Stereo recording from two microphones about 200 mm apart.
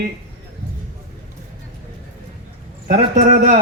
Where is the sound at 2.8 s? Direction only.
40° right (ahead or behind).